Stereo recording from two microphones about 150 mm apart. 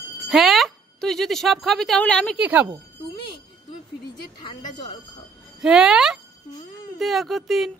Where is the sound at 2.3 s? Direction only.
10° right (ahead or behind).